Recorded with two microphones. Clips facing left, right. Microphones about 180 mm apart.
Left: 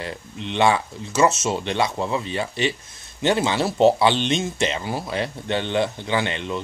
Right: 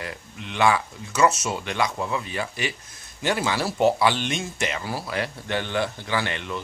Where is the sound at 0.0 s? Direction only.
25° left (ahead or behind).